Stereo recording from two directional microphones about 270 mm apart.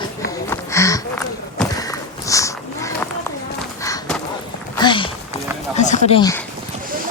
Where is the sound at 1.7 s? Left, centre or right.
Centre.